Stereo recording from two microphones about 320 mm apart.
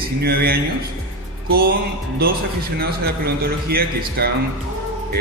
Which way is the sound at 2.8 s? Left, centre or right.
Right.